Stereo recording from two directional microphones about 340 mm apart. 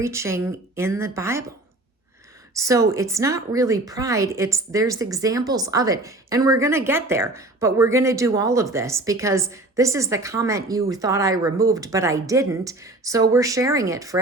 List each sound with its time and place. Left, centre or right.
0.0 s a woman's voice: centre
2.6 s a woman's voice: centre